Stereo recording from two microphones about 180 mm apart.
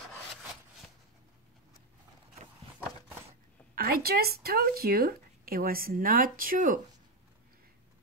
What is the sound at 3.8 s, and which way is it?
Speech, 55° right (ahead or behind).